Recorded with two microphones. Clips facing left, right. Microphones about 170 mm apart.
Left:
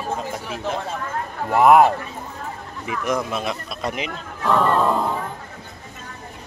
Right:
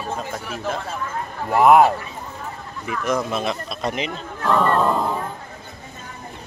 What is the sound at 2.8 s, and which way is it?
Speech, 15° left (ahead or behind).